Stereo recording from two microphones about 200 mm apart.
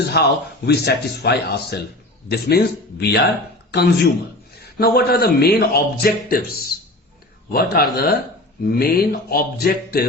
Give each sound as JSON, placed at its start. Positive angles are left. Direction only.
{"t": 0.1, "sound": "a man's voice", "side_deg": 55}